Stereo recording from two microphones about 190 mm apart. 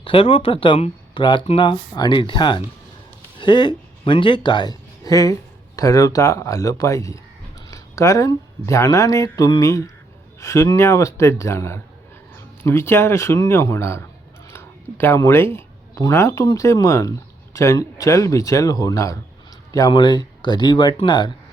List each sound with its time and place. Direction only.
0.0 s a man's voice: 30° left (ahead or behind)